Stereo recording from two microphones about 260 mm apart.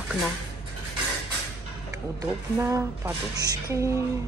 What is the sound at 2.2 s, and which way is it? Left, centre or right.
A woman's voice, centre.